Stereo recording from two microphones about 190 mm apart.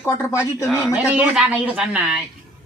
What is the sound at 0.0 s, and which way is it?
Speech, 10° left (ahead or behind).